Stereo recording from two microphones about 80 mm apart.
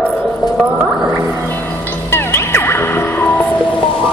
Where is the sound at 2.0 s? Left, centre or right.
Left.